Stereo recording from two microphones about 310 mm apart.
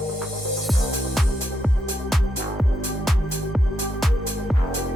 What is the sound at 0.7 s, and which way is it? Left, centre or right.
Music, centre.